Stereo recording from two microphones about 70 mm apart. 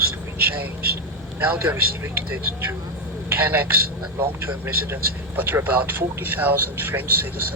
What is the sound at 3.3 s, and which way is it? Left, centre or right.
A man's voice, right.